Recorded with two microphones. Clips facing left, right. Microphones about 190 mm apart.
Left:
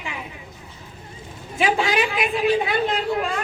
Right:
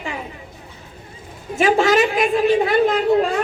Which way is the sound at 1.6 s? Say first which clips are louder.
Right 6 dB; 45° right (ahead or behind).